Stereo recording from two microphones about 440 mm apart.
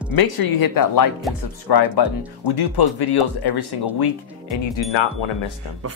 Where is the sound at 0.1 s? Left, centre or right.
Left.